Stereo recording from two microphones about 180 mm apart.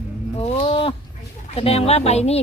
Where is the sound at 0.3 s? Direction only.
30° left (ahead or behind).